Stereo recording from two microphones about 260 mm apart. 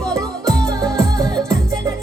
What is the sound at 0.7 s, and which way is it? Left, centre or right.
Music, centre.